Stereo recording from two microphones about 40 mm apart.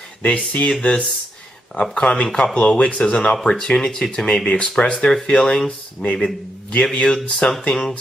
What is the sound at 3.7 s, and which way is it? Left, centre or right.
Speech, centre.